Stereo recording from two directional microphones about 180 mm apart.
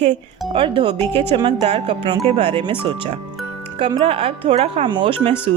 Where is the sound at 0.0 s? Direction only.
35° right (ahead or behind).